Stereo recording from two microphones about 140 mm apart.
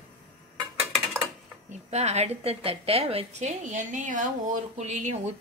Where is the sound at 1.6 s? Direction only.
50° right (ahead or behind).